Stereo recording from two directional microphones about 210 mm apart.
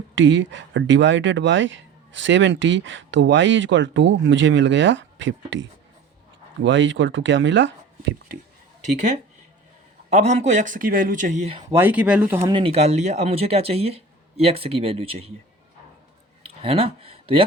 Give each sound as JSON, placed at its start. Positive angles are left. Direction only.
{"t": 0.2, "sound": "speech", "side_deg": -60}
{"t": 6.7, "sound": "speech", "side_deg": -60}
{"t": 10.1, "sound": "speech", "side_deg": -30}
{"t": 11.7, "sound": "speech", "side_deg": -10}
{"t": 12.5, "sound": "speech", "side_deg": -30}
{"t": 16.6, "sound": "speech", "side_deg": -25}